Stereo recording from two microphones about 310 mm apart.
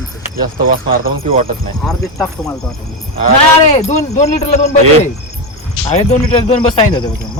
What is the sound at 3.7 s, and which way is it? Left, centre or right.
Speech, left.